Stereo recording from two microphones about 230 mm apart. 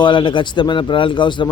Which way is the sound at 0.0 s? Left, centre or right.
Left.